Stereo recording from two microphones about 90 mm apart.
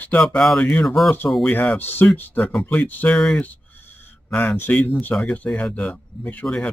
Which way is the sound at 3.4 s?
20° left (ahead or behind).